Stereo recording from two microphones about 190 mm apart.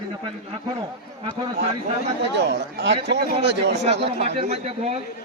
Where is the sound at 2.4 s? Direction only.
65° right (ahead or behind).